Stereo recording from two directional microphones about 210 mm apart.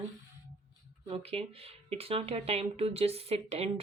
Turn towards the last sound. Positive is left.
turn(degrees=-30)  # may be behind; listen again after turning